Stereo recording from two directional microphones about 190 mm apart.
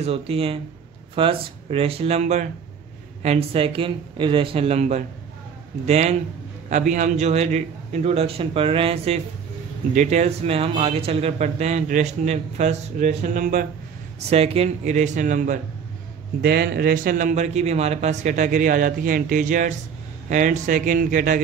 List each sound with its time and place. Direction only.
0.0 s a man's voice: 30° right (ahead or behind)
14.3 s a man's voice: 30° right (ahead or behind)
16.3 s a man's voice: 55° right (ahead or behind)